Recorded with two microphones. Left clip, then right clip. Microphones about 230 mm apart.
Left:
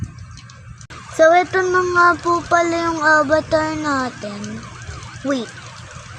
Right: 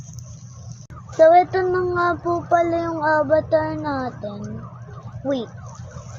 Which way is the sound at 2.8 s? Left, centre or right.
Left.